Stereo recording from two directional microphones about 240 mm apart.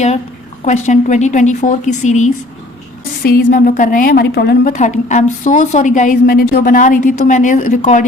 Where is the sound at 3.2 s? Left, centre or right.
Left.